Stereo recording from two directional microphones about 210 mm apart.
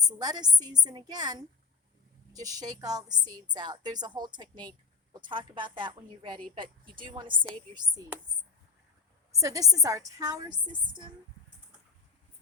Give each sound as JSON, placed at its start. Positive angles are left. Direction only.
{"t": 0.0, "sound": "a woman's voice", "side_deg": -20}
{"t": 9.3, "sound": "a woman's voice", "side_deg": -15}